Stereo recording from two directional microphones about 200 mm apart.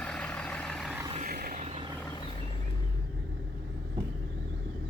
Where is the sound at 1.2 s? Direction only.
45° right (ahead or behind).